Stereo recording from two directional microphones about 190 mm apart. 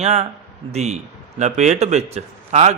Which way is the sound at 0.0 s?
35° right (ahead or behind).